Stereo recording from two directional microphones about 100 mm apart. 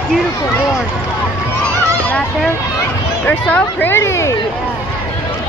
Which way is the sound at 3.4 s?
15° left (ahead or behind).